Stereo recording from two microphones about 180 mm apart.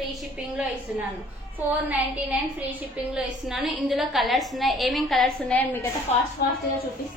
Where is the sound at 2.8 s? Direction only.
5° right (ahead or behind).